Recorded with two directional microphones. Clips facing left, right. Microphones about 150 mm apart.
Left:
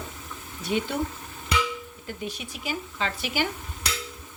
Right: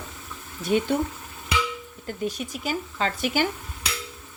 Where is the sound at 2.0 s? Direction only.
45° right (ahead or behind).